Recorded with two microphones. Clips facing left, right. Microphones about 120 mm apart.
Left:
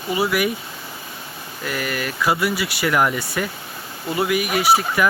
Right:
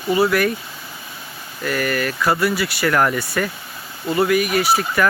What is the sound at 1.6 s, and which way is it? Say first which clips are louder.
Speech: right 4 dB; 15° left (ahead or behind).